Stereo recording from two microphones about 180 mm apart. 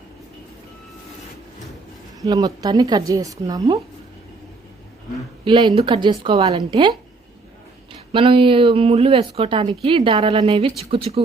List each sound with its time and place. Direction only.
2.2 s a woman's voice: 20° right (ahead or behind)
5.5 s a woman's voice: 25° right (ahead or behind)
8.1 s a woman's voice: 30° right (ahead or behind)